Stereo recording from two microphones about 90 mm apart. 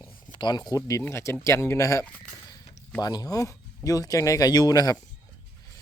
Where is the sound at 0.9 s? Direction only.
30° left (ahead or behind).